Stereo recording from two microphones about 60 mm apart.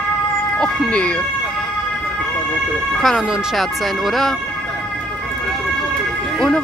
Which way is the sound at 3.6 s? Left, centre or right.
Centre.